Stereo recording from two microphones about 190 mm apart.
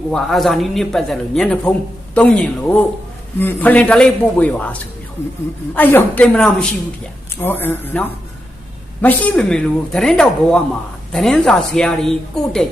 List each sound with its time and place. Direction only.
0.1 s a man's voice: centre (ahead or behind)